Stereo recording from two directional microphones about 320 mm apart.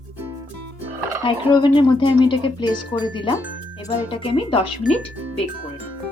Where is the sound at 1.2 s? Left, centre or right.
Centre.